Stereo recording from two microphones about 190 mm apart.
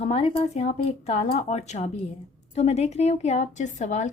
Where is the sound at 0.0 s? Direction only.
30° left (ahead or behind).